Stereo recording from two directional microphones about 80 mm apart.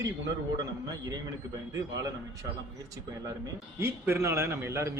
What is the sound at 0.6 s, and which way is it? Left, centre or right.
Speech, right.